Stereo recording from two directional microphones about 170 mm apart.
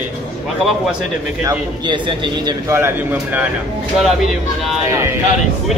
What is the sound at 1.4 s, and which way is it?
Speech, 15° right (ahead or behind).